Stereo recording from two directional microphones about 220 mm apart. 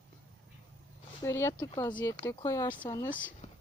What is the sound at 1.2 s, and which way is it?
Speech, 15° left (ahead or behind).